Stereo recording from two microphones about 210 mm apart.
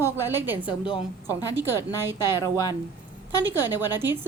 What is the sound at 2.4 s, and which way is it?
Speech, 15° left (ahead or behind).